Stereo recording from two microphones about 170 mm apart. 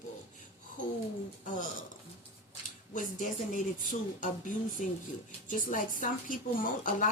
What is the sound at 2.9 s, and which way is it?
A woman's voice, 50° left (ahead or behind).